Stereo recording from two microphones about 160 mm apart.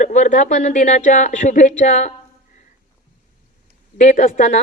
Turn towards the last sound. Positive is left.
turn(degrees=50)  # may be behind; listen again after turning